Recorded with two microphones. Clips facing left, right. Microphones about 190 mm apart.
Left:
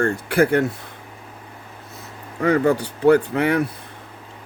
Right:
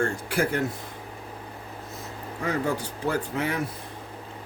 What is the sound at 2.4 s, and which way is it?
Speech, 65° left (ahead or behind).